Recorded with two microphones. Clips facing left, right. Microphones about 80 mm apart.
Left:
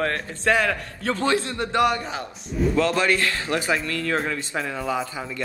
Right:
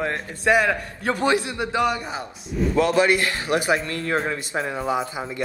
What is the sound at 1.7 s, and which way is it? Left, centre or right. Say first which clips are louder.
A man's voice: left 2 dB; centre.